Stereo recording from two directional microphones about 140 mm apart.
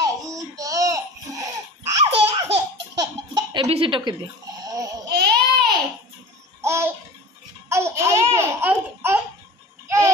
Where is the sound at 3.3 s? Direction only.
35° right (ahead or behind).